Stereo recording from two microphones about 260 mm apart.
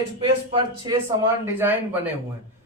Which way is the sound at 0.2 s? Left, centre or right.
Centre.